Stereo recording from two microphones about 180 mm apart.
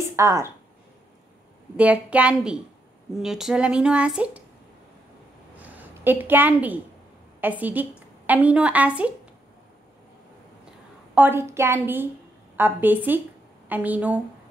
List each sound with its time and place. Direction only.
0.1 s a woman's voice: 15° right (ahead or behind)
1.8 s a woman's voice: 5° right (ahead or behind)
5.6 s a woman's voice: 10° right (ahead or behind)
11.1 s a woman's voice: 10° right (ahead or behind)